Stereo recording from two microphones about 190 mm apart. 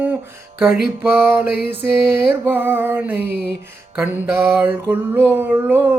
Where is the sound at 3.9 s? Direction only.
10° right (ahead or behind).